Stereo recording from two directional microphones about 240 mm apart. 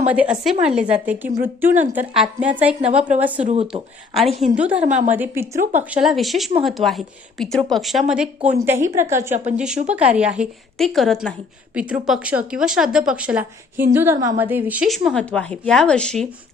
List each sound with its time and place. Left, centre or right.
0.1 s a woman's voice: centre
3.4 s a woman's voice: right
4.1 s a woman's voice: centre
4.8 s a woman's voice: right
5.1 s a woman's voice: centre
9.3 s a woman's voice: right
9.9 s a woman's voice: centre